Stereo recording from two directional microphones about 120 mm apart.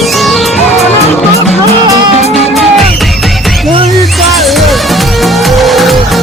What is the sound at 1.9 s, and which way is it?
Music, 35° right (ahead or behind).